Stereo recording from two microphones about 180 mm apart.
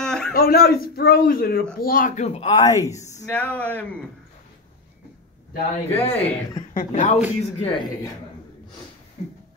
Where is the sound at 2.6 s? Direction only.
15° left (ahead or behind).